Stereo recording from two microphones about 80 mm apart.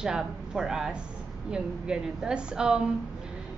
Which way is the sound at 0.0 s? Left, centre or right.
Centre.